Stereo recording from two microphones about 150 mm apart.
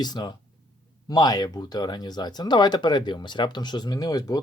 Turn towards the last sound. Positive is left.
turn(degrees=25)  # may be behind; listen again after turning